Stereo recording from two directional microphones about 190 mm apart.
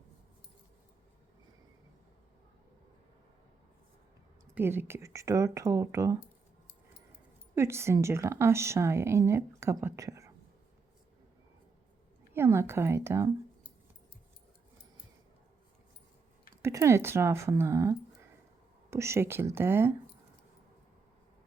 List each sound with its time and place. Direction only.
4.5 s a woman's voice: 10° right (ahead or behind)
7.5 s a woman's voice: 15° right (ahead or behind)
12.3 s a woman's voice: 15° right (ahead or behind)
16.6 s a woman's voice: 15° right (ahead or behind)